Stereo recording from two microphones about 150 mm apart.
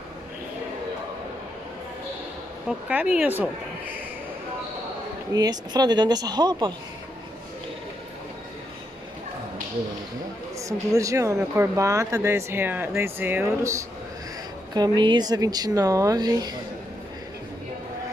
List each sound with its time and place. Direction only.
2.9 s speech: 10° right (ahead or behind)
5.3 s speech: 25° right (ahead or behind)
10.6 s speech: 20° right (ahead or behind)
14.7 s speech: 30° right (ahead or behind)